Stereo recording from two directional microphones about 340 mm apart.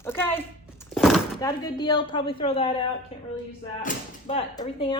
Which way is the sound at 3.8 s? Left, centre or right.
Centre.